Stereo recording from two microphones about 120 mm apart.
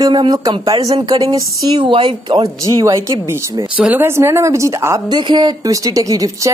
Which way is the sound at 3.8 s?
15° right (ahead or behind).